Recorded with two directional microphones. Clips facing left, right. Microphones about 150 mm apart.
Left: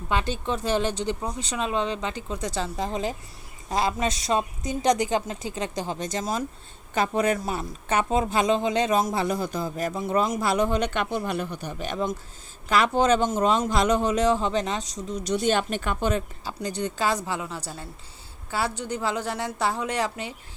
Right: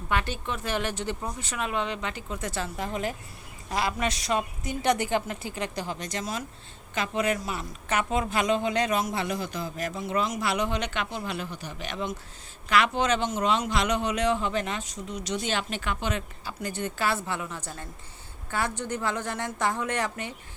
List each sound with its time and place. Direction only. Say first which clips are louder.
0.1 s speech: left 3 dB; 30° left (ahead or behind)
9.0 s a man's voice: left 4 dB; 40° left (ahead or behind)
15.3 s a man's voice: left 7 dB; 50° left (ahead or behind)
16.6 s speech: left 3 dB; 15° left (ahead or behind)
18.9 s speech: left 3 dB; 10° left (ahead or behind)